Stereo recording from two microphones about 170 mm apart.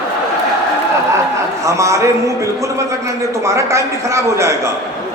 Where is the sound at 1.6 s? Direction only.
20° right (ahead or behind).